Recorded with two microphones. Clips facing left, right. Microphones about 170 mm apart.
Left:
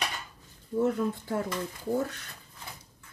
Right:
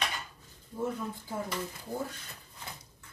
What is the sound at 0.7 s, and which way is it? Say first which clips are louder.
Speech: left 8 dB; 70° left (ahead or behind).